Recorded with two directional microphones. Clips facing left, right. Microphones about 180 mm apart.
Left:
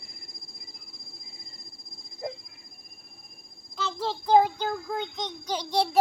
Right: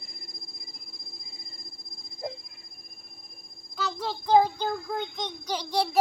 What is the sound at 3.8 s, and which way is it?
Child singing, centre (ahead or behind).